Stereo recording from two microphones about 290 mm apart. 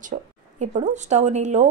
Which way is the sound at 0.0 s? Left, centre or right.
Right.